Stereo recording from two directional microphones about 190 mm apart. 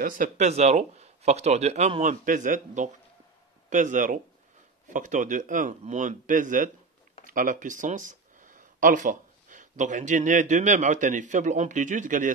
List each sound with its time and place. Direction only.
0.0 s speech: 45° right (ahead or behind)